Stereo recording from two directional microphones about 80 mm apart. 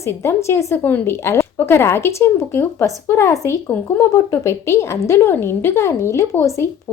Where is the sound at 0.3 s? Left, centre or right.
Left.